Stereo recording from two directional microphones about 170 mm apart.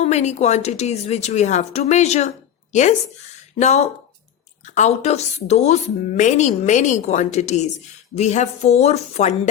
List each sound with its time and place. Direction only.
0.0 s a woman's voice: 40° left (ahead or behind)
3.3 s a sound: 40° left (ahead or behind)
4.6 s a woman's voice: 45° left (ahead or behind)